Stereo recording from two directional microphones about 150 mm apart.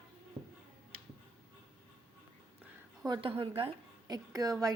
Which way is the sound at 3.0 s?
30° right (ahead or behind).